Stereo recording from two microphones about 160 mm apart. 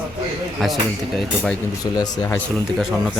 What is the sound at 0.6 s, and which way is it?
Speech, centre (ahead or behind).